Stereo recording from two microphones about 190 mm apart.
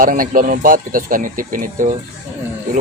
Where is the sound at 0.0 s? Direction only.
45° right (ahead or behind).